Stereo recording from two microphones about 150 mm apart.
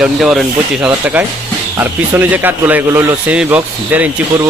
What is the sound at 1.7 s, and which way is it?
Speech, 10° right (ahead or behind).